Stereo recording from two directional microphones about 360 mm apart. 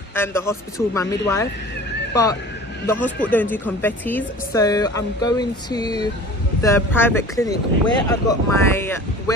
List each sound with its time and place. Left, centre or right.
0.1 s speech: centre
3.0 s speech: centre